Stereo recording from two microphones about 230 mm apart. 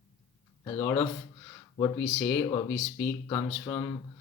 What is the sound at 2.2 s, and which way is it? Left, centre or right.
Speech, centre.